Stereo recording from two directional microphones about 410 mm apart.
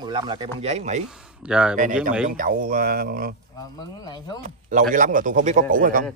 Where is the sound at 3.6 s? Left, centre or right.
Centre.